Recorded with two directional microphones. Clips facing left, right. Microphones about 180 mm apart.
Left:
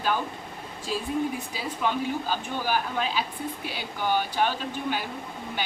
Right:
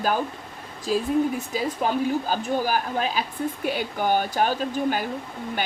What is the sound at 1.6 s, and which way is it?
Speech, 45° right (ahead or behind).